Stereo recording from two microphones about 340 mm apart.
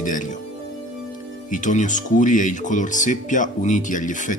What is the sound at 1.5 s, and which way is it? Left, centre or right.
Speech, left.